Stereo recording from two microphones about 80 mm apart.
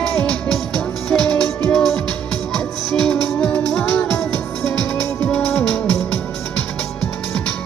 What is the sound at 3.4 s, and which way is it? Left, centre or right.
Music, centre.